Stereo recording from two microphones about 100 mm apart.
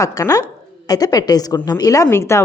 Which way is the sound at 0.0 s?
35° left (ahead or behind).